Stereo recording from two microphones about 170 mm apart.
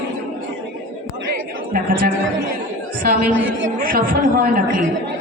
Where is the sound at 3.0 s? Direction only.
55° right (ahead or behind).